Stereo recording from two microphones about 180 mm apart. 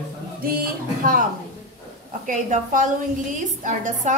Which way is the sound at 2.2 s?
45° right (ahead or behind).